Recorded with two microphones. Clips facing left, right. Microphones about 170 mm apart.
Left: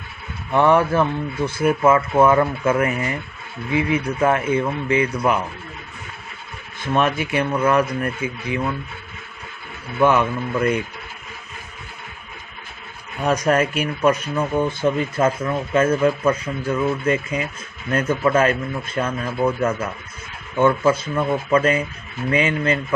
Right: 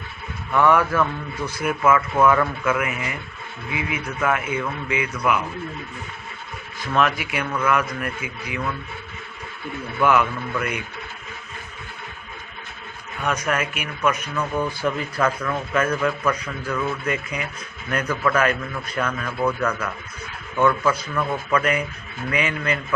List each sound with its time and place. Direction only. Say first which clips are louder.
0.5 s speech: left 2 dB; 30° left (ahead or behind)
6.9 s speech: left 3 dB; 25° left (ahead or behind)
10.0 s speech: left 3 dB; 30° left (ahead or behind)
13.2 s speech: left 6 dB; 35° left (ahead or behind)